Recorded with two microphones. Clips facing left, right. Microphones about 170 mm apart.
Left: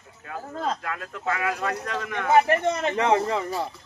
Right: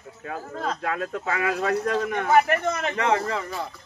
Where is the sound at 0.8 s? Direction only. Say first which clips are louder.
Right 6 dB; 45° right (ahead or behind).